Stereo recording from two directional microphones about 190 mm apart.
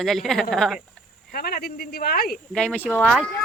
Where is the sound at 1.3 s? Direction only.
50° left (ahead or behind).